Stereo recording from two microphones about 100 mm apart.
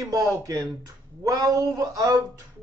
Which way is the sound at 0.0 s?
35° right (ahead or behind).